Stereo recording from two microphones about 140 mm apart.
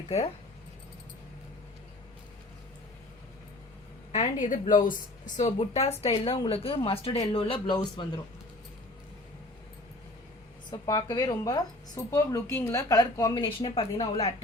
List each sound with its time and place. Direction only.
4.1 s a woman's voice: 60° left (ahead or behind)
5.5 s a woman's voice: 45° left (ahead or behind)
10.7 s a woman's voice: 25° left (ahead or behind)
12.1 s a woman's voice: 20° left (ahead or behind); by 14.3 s 50° left (ahead or behind)